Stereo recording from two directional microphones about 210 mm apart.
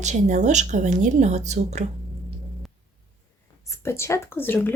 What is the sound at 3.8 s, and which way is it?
Speech, 10° left (ahead or behind).